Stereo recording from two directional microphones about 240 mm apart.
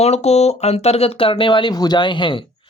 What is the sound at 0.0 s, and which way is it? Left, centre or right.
Speech, left.